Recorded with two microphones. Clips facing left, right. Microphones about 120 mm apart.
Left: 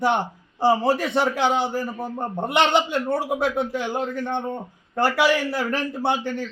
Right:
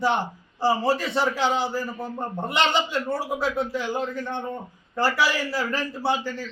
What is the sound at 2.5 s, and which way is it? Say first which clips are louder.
Speech: left 4 dB; 60° left (ahead or behind).